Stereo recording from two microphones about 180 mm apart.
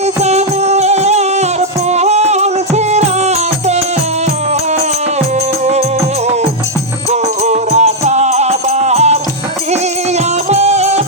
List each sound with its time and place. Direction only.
0.2 s music: 35° right (ahead or behind)
7.1 s music: 35° right (ahead or behind)
10.5 s music: 35° right (ahead or behind)